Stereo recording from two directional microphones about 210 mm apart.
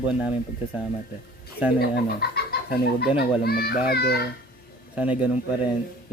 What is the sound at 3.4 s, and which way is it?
Speech, 45° left (ahead or behind).